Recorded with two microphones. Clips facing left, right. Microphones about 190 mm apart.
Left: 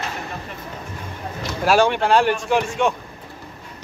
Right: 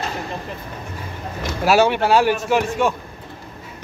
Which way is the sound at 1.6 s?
5° right (ahead or behind).